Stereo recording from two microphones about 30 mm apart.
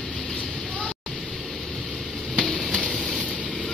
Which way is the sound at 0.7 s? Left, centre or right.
Left.